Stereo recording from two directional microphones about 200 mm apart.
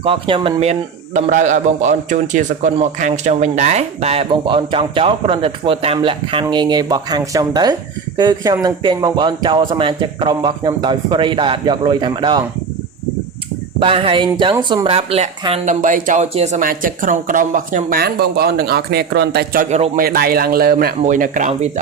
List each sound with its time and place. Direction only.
0.0 s a man's voice: 25° right (ahead or behind)
13.7 s a man's voice: 25° right (ahead or behind)